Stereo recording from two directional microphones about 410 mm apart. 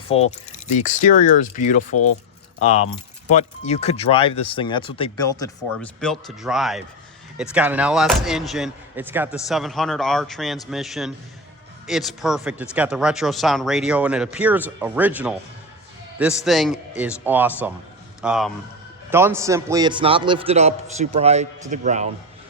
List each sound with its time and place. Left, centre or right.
0.1 s speech: centre
3.2 s a man's voice: centre